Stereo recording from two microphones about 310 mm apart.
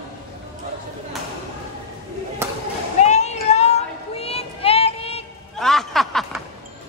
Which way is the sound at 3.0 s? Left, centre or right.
Left.